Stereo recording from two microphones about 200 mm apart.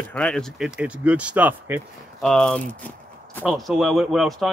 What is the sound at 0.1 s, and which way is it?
Speech, 5° left (ahead or behind).